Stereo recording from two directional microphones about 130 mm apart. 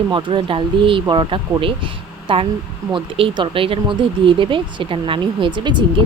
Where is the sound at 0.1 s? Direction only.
40° right (ahead or behind).